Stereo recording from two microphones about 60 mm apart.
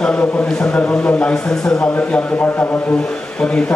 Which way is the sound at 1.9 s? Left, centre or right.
Left.